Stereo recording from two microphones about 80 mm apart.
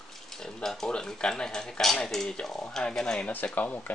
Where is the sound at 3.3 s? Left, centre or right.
Left.